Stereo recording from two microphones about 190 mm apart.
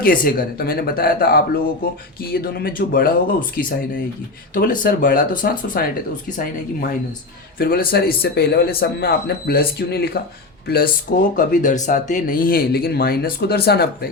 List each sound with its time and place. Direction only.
0.0 s speech: 50° left (ahead or behind)
11.3 s speech: 40° left (ahead or behind)